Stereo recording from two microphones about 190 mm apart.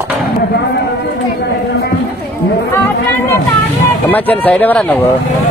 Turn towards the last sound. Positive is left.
turn(degrees=10)  # may be behind; listen again after turning